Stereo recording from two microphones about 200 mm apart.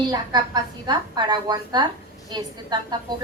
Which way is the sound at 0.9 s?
20° right (ahead or behind).